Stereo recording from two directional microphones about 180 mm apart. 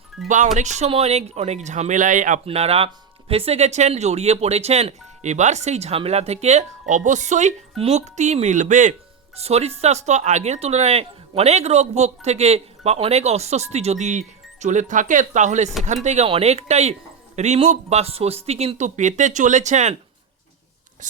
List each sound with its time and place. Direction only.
0.5 s speech: 40° right (ahead or behind)
21.0 s speech: 45° right (ahead or behind)